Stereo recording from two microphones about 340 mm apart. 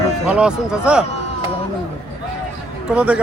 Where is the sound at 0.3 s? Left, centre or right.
Centre.